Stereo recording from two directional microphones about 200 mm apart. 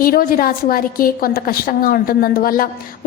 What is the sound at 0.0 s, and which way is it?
A woman's voice, 45° left (ahead or behind).